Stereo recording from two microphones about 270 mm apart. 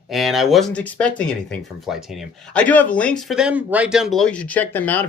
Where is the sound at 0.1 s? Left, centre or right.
Centre.